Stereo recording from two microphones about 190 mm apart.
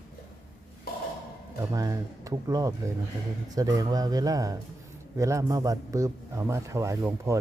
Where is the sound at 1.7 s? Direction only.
20° right (ahead or behind).